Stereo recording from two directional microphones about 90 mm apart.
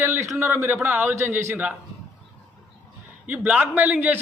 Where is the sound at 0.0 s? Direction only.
25° right (ahead or behind).